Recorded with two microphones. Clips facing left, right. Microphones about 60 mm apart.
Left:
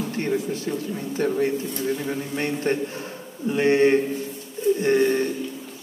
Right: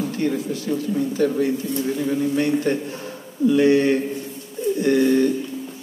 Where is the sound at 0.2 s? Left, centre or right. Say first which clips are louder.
Right 3 dB; left.